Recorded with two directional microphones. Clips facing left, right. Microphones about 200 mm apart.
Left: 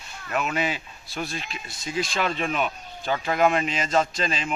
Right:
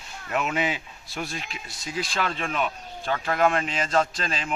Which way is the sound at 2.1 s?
Centre (ahead or behind).